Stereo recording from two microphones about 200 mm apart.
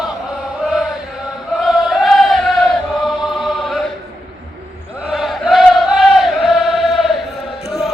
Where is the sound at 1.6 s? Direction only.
Centre (ahead or behind).